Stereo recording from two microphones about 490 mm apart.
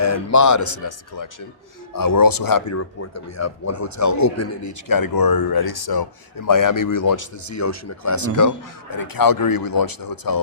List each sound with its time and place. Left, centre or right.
0.0 s speech: left